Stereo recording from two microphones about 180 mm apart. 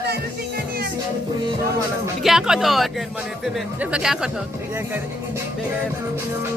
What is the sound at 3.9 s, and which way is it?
Music, 5° right (ahead or behind).